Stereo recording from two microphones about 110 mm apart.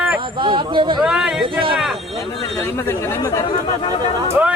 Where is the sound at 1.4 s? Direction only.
50° right (ahead or behind).